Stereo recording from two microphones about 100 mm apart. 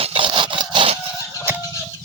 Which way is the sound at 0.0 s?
75° right (ahead or behind).